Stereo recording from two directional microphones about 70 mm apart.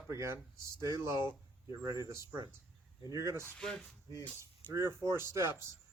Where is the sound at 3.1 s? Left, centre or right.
Right.